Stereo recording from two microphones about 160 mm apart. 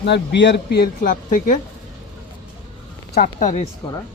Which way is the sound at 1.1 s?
55° left (ahead or behind).